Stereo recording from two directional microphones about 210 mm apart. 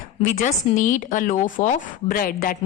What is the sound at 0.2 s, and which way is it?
A woman's voice, 35° left (ahead or behind).